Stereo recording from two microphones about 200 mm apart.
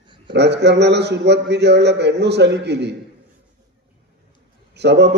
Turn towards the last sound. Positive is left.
turn(degrees=-55)  # may be behind; listen again after turning